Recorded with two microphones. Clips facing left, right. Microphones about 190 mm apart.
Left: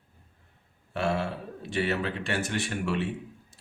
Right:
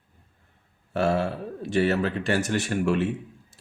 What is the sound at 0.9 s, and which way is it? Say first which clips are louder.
Speech: right 5 dB; 40° right (ahead or behind).